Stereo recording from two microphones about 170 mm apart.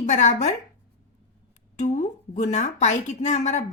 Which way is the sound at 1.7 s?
45° left (ahead or behind).